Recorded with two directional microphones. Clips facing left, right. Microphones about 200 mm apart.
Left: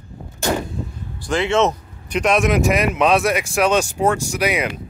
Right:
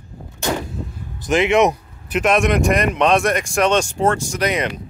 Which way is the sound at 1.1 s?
20° right (ahead or behind).